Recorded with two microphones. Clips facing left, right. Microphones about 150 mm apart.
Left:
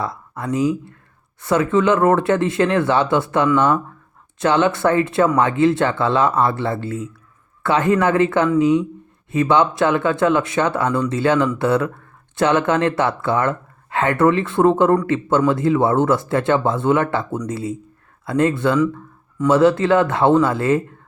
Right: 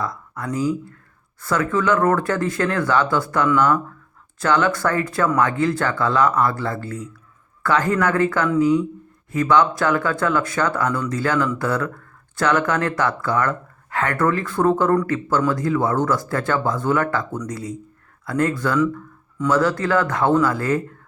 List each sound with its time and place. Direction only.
0.0 s speech: 25° left (ahead or behind)
18.8 s speech: 10° left (ahead or behind)
19.5 s speech: 25° left (ahead or behind)